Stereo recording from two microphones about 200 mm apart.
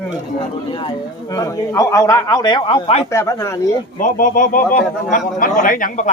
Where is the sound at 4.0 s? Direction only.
45° left (ahead or behind).